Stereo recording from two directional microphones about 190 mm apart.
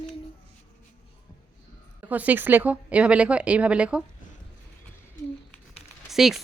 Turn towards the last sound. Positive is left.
turn(degrees=0)  # may be behind; listen again after turning